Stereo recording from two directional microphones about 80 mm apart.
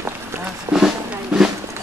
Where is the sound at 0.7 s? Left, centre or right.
Centre.